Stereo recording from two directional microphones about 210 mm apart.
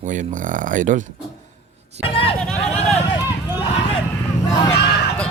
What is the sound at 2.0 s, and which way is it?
Speech, 25° left (ahead or behind).